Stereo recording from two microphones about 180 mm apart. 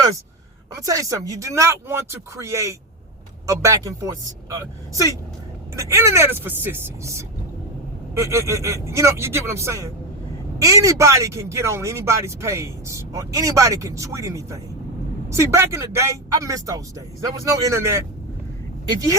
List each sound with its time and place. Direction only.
0.8 s speech: 20° right (ahead or behind)
5.7 s speech: 15° right (ahead or behind)